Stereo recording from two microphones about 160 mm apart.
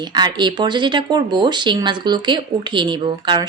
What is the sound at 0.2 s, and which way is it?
Speech, 30° right (ahead or behind).